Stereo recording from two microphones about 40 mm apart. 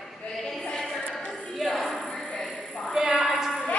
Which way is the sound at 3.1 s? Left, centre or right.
Right.